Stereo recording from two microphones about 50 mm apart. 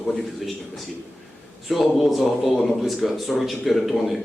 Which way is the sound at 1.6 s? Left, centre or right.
Centre.